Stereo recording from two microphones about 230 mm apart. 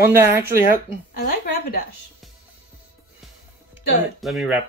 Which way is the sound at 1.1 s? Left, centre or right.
Left.